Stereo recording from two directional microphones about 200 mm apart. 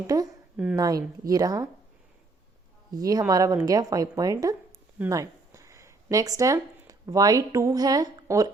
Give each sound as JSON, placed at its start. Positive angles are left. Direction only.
{"t": 0.1, "sound": "a woman's voice", "side_deg": -20}
{"t": 0.5, "sound": "speech", "side_deg": -5}
{"t": 1.3, "sound": "speech", "side_deg": -20}
{"t": 2.9, "sound": "speech", "side_deg": -20}